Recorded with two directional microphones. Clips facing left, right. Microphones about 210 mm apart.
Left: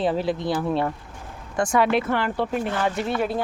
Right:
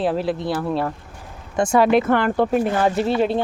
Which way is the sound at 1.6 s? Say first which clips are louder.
Right 4 dB; 25° right (ahead or behind).